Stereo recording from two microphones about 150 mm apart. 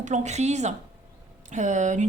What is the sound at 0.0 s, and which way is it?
Speech, 50° right (ahead or behind).